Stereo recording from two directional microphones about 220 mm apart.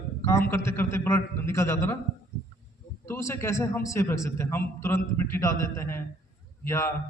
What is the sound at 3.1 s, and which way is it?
A man's voice, 10° left (ahead or behind).